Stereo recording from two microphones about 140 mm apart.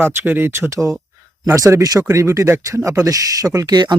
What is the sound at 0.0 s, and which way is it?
Speech, 15° right (ahead or behind).